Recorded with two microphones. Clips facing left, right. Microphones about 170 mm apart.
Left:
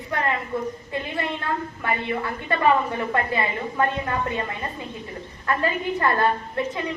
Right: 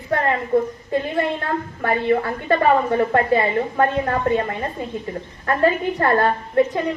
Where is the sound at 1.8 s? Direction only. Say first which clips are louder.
Right 7 dB; 45° right (ahead or behind).